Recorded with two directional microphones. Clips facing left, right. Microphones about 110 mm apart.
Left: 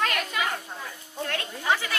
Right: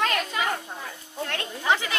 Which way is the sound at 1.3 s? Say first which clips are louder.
Right 2 dB; 20° right (ahead or behind).